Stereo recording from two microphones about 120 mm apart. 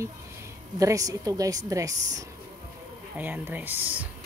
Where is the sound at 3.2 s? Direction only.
15° right (ahead or behind).